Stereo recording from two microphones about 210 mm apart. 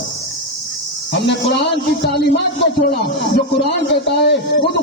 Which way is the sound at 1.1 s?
55° left (ahead or behind).